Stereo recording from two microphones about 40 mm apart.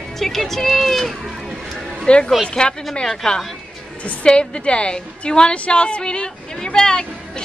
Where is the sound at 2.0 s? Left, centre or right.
Left.